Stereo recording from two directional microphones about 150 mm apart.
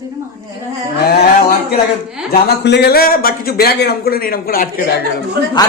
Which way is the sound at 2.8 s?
85° left.